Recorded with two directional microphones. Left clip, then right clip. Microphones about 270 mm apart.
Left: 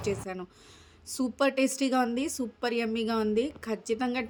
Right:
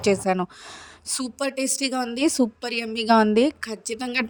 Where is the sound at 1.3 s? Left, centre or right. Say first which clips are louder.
Left 2 dB; centre.